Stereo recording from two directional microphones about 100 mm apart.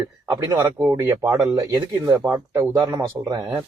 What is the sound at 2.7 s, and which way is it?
Speech, 40° right (ahead or behind).